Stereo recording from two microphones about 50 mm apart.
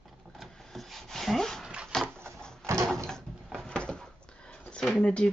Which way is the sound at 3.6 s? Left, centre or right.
Centre.